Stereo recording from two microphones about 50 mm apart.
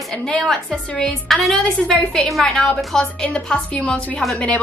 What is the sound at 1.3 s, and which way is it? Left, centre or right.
A woman's voice, centre.